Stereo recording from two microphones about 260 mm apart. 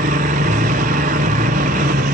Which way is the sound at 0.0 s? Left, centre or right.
Right.